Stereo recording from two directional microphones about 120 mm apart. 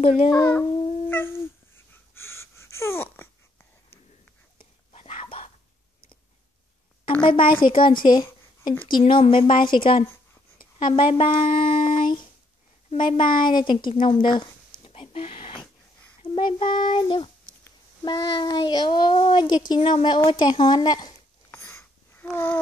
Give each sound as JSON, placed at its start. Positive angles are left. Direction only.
{"t": 0.0, "sound": "a child's voice", "side_deg": 55}
{"t": 0.4, "sound": "speech", "side_deg": 15}
{"t": 1.0, "sound": "cat", "side_deg": 20}
{"t": 2.1, "sound": "wheeze", "side_deg": 20}
{"t": 4.9, "sound": "whispering", "side_deg": 55}
{"t": 7.2, "sound": "a child's voice", "side_deg": 45}
{"t": 14.9, "sound": "a sound", "side_deg": 50}
{"t": 16.2, "sound": "a child's voice", "side_deg": 50}
{"t": 21.5, "sound": "a sound", "side_deg": 20}